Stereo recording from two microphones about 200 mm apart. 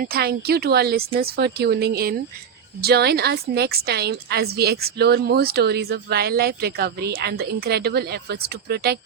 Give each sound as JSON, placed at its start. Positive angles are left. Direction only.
{"t": 0.0, "sound": "a woman's voice", "side_deg": -50}